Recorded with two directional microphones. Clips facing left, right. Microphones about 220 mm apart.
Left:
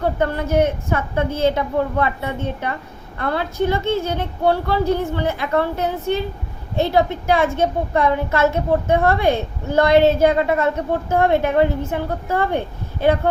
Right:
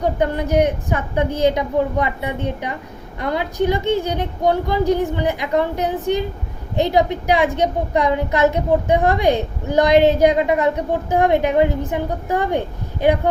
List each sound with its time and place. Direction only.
0.0 s a child's voice: 15° right (ahead or behind)